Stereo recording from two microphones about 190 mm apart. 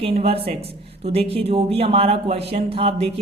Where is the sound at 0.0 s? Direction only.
30° right (ahead or behind).